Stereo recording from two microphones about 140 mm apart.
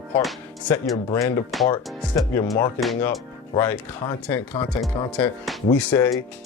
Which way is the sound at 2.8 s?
10° left (ahead or behind).